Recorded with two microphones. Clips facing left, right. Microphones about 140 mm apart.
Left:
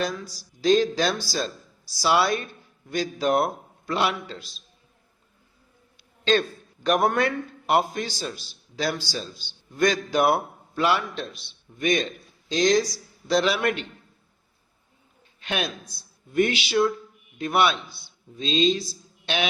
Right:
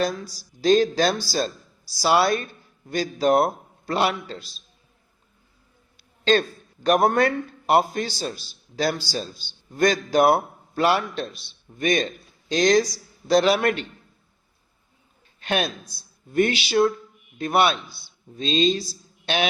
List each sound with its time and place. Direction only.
0.6 s a man's voice: 40° right (ahead or behind)
6.0 s a sound: 40° right (ahead or behind)
6.8 s a man's voice: 35° right (ahead or behind)
12.5 s a man's voice: 55° right (ahead or behind)
15.4 s a woman's voice: 45° right (ahead or behind)